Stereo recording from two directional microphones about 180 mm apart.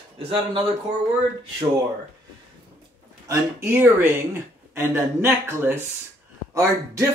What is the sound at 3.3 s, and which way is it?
Speech, 15° right (ahead or behind).